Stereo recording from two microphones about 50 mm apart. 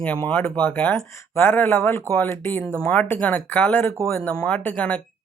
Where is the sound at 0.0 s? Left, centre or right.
Left.